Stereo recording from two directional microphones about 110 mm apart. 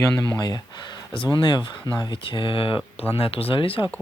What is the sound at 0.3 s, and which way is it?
Speech, 40° left (ahead or behind).